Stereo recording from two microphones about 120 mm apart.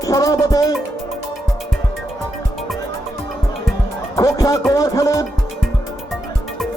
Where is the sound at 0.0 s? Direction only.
30° left (ahead or behind).